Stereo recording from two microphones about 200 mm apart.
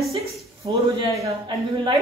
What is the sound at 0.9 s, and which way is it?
Speech, 15° right (ahead or behind).